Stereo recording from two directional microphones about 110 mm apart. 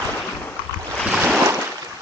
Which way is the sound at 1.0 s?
5° right (ahead or behind).